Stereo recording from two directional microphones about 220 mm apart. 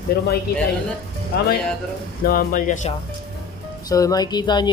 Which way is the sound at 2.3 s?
40° left (ahead or behind).